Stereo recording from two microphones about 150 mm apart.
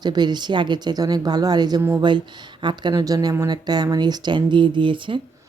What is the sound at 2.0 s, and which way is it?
Speech, 30° right (ahead or behind).